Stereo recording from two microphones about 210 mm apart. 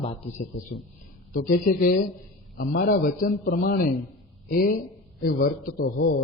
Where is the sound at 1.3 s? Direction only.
45° left (ahead or behind).